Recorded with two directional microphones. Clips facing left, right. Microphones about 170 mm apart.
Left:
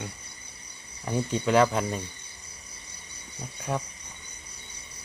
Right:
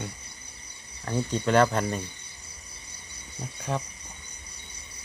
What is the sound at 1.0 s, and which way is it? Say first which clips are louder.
Speech: even; 10° left (ahead or behind).